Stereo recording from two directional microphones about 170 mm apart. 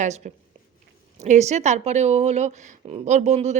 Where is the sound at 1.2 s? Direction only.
40° right (ahead or behind).